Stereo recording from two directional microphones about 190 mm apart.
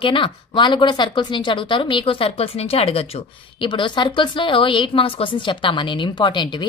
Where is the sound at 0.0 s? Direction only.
25° left (ahead or behind).